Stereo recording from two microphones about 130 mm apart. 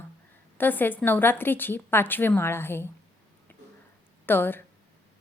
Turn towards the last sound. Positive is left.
turn(degrees=15)  # may be behind; listen again after turning